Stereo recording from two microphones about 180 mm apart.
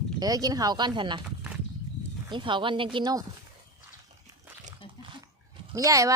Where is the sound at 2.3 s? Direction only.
25° right (ahead or behind).